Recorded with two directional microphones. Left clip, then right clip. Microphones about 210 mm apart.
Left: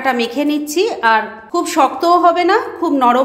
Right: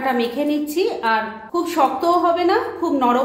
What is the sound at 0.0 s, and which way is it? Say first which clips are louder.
A woman's voice: left 4 dB; 40° left (ahead or behind).